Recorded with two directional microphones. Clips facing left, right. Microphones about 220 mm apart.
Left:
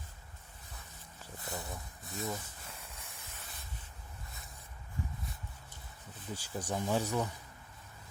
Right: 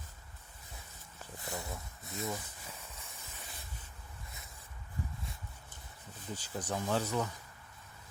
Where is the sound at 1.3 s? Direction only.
20° right (ahead or behind).